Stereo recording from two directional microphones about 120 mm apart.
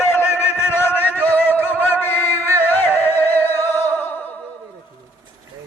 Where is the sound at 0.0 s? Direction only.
20° left (ahead or behind).